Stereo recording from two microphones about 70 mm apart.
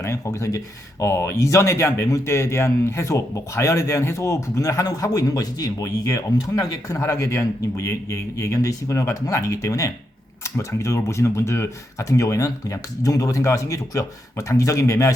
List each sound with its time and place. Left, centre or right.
0.0 s speech: left